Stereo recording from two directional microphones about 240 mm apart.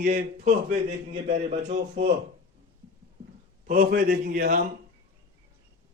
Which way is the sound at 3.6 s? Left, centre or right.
Right.